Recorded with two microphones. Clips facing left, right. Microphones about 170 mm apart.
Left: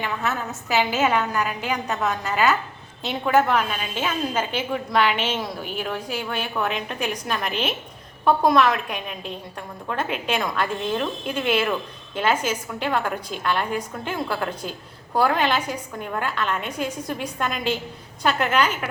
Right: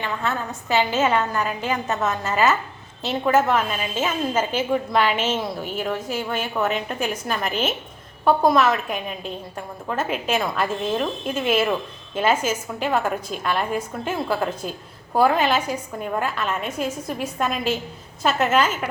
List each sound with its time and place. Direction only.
0.0 s a woman's voice: 5° left (ahead or behind)
5.0 s a woman's voice: 45° right (ahead or behind)
6.6 s a woman's voice: centre (ahead or behind)